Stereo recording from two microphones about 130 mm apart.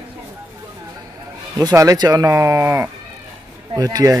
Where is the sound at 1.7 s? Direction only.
25° right (ahead or behind).